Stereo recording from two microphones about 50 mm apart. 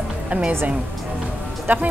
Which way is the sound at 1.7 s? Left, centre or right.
Right.